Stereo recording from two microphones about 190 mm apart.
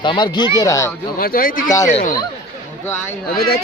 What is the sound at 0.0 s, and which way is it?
Speech, 25° left (ahead or behind).